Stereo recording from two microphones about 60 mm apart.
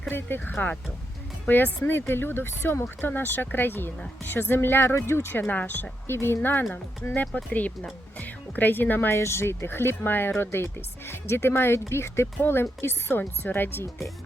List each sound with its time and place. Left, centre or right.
0.1 s speech: left
7.3 s speech: left
9.1 s speech: left